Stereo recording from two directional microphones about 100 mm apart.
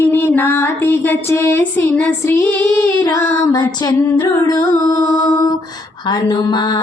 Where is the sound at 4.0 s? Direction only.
30° left (ahead or behind).